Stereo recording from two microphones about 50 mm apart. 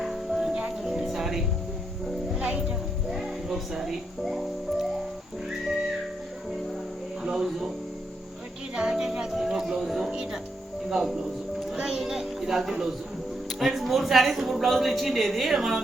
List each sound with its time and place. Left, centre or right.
0.0 s music: centre
7.2 s a sound: centre
8.7 s music: centre
10.8 s speech: centre
11.7 s a sound: centre
13.6 s a woman's voice: centre